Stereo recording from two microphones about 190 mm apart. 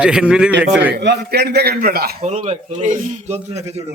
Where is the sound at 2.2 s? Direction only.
35° right (ahead or behind).